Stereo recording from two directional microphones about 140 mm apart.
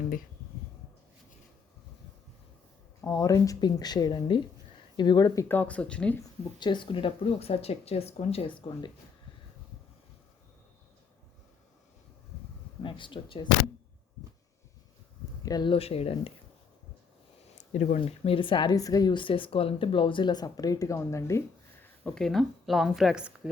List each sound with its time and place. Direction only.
3.0 s speech: 25° left (ahead or behind); by 6.1 s 10° left (ahead or behind)
6.6 s speech: 35° left (ahead or behind)
12.8 s speech: 35° left (ahead or behind)
15.4 s speech: 30° left (ahead or behind)
17.6 s speech: 60° left (ahead or behind)
18.0 s speech: 40° left (ahead or behind); by 21.4 s 20° left (ahead or behind)
21.8 s a woman's voice: 5° left (ahead or behind)